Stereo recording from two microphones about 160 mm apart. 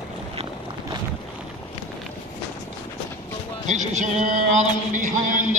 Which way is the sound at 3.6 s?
50° right (ahead or behind).